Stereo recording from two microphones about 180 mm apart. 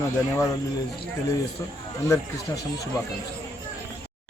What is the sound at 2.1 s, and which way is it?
Speech, 15° left (ahead or behind).